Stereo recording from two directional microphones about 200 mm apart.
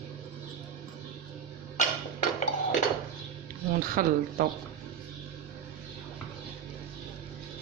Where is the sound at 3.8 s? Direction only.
45° right (ahead or behind).